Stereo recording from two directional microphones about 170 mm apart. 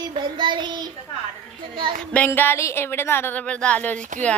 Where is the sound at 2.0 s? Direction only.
10° left (ahead or behind).